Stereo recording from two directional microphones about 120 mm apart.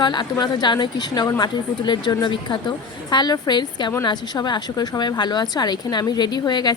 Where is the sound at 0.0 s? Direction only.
40° left (ahead or behind).